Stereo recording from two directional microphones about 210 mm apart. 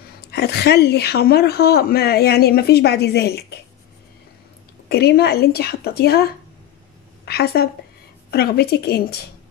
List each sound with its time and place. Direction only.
0.3 s a woman's voice: 50° left (ahead or behind)
4.8 s a woman's voice: 50° left (ahead or behind)
7.2 s a woman's voice: 50° left (ahead or behind)